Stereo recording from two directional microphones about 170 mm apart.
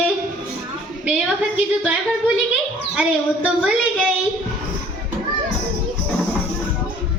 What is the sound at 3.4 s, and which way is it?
Speech, 5° right (ahead or behind).